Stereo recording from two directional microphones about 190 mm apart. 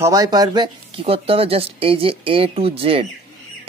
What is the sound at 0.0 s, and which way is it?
Speech, 20° right (ahead or behind).